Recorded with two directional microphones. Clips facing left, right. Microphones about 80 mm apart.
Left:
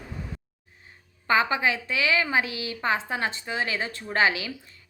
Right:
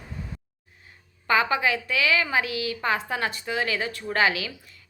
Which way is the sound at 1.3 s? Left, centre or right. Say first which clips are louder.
Even; left.